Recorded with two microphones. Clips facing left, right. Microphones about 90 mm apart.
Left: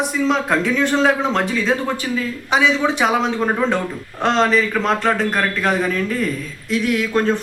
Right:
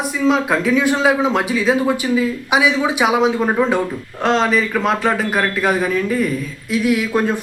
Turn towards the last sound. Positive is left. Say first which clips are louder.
# right 1 dB
turn(degrees=-10)  # may be behind; listen again after turning